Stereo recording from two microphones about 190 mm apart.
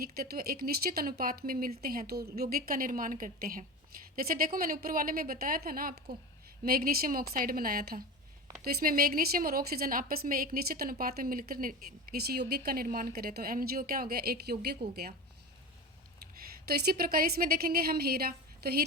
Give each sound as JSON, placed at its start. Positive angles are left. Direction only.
{"t": 0.0, "sound": "a woman's voice", "side_deg": -50}
{"t": 16.6, "sound": "a woman's voice", "side_deg": -55}